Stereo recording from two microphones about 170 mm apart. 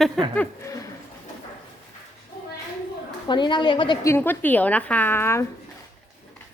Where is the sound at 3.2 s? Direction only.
25° left (ahead or behind).